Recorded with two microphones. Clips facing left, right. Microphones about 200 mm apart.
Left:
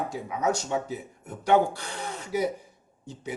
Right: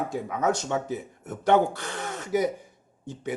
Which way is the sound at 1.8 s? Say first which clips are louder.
Right 2 dB; 50° right (ahead or behind).